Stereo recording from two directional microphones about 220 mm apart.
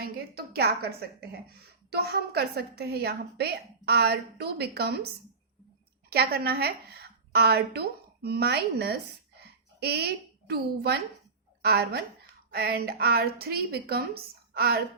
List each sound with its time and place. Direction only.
0.0 s a woman's voice: 45° right (ahead or behind)